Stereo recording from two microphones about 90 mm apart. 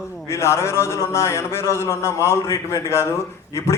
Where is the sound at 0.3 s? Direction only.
30° left (ahead or behind).